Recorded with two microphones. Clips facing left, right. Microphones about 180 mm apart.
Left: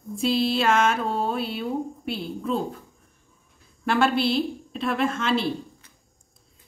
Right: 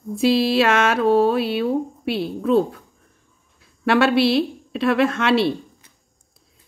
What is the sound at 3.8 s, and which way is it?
A woman's voice, 75° right (ahead or behind).